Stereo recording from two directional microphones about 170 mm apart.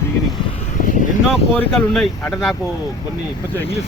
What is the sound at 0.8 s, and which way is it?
Vehicle, 50° left (ahead or behind).